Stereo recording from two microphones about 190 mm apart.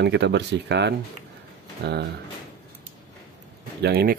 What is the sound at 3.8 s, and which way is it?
Speech, 55° right (ahead or behind).